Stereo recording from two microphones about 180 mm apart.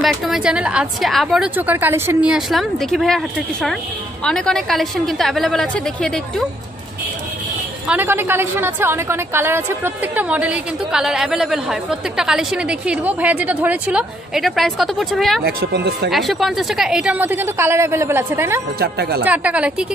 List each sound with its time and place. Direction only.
0.0 s a woman's voice: centre (ahead or behind)
7.9 s a woman's voice: 10° right (ahead or behind)
15.4 s speech: 70° right (ahead or behind)
16.1 s a woman's voice: centre (ahead or behind)
18.8 s speech: 60° right (ahead or behind)
19.2 s a woman's voice: 10° right (ahead or behind)